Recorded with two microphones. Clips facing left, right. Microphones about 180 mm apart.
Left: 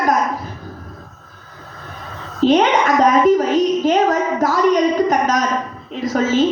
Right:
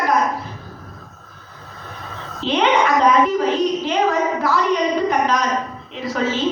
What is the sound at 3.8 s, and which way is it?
A woman's voice, 45° left (ahead or behind).